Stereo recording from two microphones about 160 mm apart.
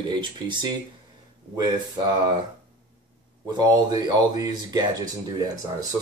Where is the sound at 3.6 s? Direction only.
25° right (ahead or behind).